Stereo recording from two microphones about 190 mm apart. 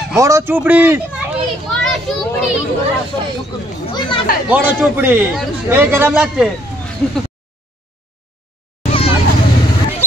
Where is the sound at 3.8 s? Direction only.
25° left (ahead or behind).